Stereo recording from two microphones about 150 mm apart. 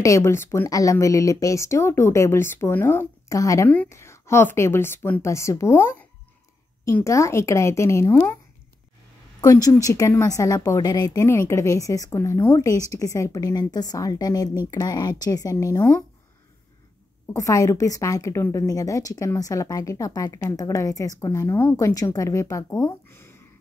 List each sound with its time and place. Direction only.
0.0 s a woman's voice: 20° left (ahead or behind)
9.4 s a woman's voice: 20° left (ahead or behind)
17.3 s a woman's voice: 20° left (ahead or behind)